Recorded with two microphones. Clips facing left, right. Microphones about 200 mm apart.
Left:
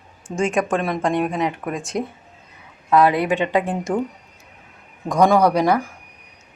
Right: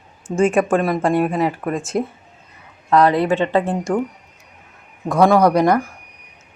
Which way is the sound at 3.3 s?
15° left (ahead or behind).